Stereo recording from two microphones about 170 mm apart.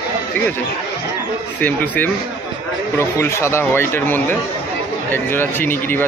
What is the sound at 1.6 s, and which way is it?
Speech, 10° left (ahead or behind).